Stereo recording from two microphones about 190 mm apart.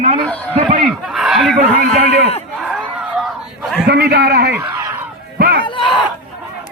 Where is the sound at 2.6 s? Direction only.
5° right (ahead or behind).